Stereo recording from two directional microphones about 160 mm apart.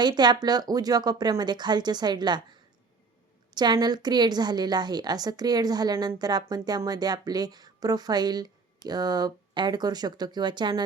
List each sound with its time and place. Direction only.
0.0 s speech: 25° right (ahead or behind)